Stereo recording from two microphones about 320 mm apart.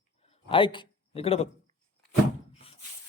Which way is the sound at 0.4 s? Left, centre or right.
Centre.